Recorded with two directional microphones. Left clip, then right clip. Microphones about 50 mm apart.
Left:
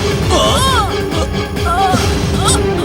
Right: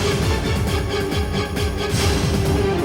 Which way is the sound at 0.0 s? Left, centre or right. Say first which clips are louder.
Left 9 dB; right.